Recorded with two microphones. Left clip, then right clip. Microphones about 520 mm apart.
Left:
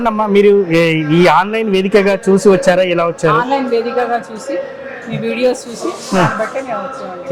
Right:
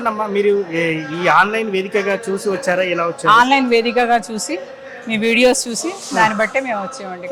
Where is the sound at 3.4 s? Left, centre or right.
Right.